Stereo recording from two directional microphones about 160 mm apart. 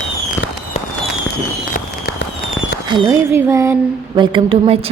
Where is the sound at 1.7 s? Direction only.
75° left (ahead or behind).